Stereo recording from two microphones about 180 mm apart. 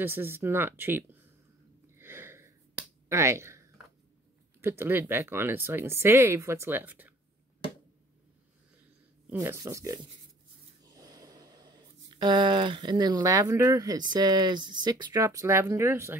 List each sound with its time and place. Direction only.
0.0 s speech: 10° right (ahead or behind)
2.0 s a sound: 15° right (ahead or behind)
3.1 s speech: 15° right (ahead or behind)
9.3 s speech: 15° right (ahead or behind)
10.9 s a sound: 20° right (ahead or behind)
14.1 s speech: 20° right (ahead or behind)